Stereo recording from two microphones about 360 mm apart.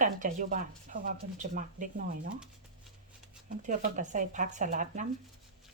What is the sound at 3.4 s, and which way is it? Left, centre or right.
Speech, right.